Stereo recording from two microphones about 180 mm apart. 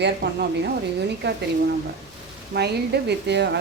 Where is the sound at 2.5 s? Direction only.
60° right (ahead or behind).